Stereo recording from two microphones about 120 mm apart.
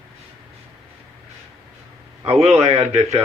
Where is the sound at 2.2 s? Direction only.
60° right (ahead or behind).